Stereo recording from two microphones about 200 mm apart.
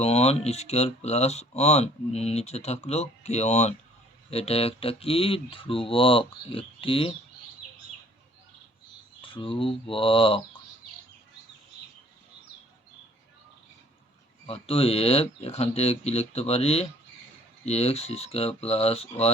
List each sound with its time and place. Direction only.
0.0 s speech: 30° left (ahead or behind)
9.2 s speech: 25° left (ahead or behind)
14.4 s speech: 30° left (ahead or behind)